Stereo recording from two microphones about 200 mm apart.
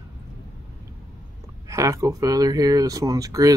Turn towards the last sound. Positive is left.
turn(degrees=-15)  # may be behind; listen again after turning